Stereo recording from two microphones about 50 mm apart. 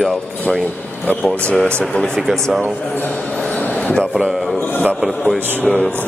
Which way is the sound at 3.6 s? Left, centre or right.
Left.